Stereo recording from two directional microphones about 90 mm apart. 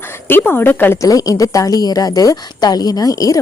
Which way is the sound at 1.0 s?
40° left (ahead or behind).